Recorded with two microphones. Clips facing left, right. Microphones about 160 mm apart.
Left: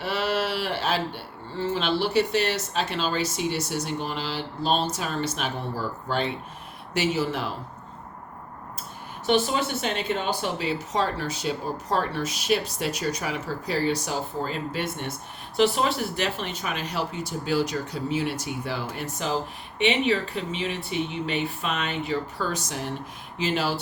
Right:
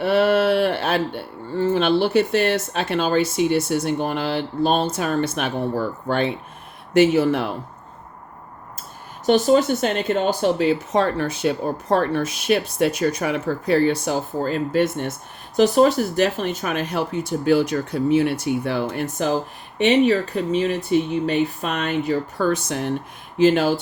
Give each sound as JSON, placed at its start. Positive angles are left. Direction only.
{"t": 0.0, "sound": "speech", "side_deg": -55}
{"t": 9.2, "sound": "speech", "side_deg": -40}